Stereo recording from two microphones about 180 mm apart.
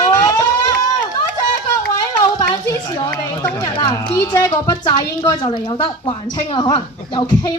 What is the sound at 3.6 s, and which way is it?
A woman's voice, 20° left (ahead or behind).